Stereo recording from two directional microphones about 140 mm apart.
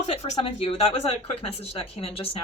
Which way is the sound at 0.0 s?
50° left (ahead or behind).